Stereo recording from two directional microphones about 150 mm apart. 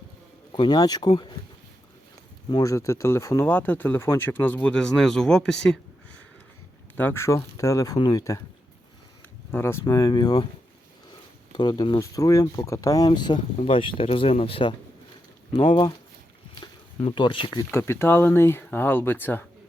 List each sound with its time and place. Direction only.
0.5 s speech: 30° left (ahead or behind)
2.5 s speech: 25° left (ahead or behind); by 5.8 s 5° left (ahead or behind)
6.9 s speech: 15° left (ahead or behind)
9.5 s speech: 15° left (ahead or behind)
11.5 s speech: 30° left (ahead or behind)
17.0 s speech: 35° left (ahead or behind)
17.7 s speech: 15° left (ahead or behind)